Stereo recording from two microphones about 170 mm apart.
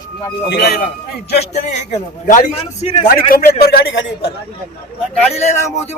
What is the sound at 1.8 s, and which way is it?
Speech, 45° left (ahead or behind).